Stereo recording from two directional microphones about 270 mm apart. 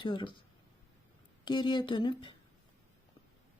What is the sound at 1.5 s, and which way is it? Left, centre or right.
Speech, centre.